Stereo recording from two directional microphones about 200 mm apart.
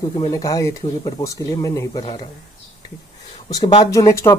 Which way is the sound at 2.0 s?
30° left (ahead or behind).